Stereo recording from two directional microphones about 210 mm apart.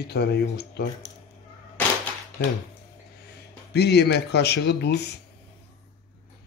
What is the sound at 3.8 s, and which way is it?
A man's voice, 50° left (ahead or behind).